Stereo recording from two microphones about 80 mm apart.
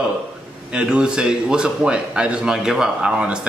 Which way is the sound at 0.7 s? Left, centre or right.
Centre.